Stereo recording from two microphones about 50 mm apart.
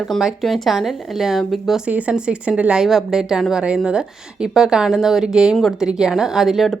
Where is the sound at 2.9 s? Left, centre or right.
Centre.